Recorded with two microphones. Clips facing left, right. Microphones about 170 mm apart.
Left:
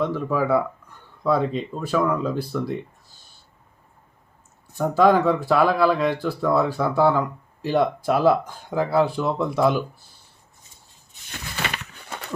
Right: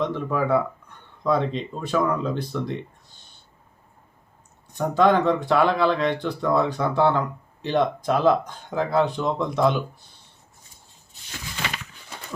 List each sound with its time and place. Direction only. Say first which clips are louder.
0.0 s speech: left 1 dB; 5° left (ahead or behind)
4.7 s speech: left 2 dB; 5° left (ahead or behind)
11.3 s a sound: left 2 dB; 60° left (ahead or behind)